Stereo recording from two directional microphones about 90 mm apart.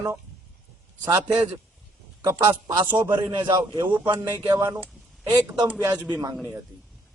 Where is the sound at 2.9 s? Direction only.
25° right (ahead or behind).